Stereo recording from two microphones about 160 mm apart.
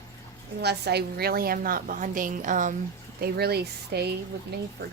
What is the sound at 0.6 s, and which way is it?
A woman's voice, 90° right.